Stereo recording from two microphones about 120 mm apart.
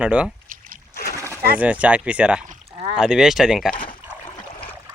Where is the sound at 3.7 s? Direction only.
40° left (ahead or behind).